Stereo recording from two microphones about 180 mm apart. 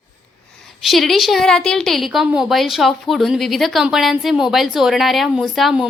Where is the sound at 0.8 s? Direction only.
Centre (ahead or behind).